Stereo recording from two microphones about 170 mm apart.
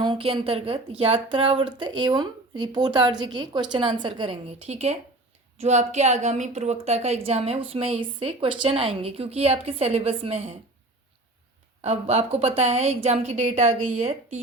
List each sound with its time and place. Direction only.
0.0 s a woman's voice: 30° right (ahead or behind)
11.8 s a woman's voice: 40° right (ahead or behind)